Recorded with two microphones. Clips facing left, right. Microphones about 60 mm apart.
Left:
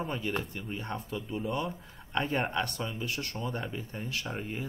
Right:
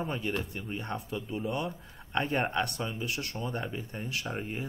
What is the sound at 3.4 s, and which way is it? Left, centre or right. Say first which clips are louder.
Speech: right 1 dB; centre.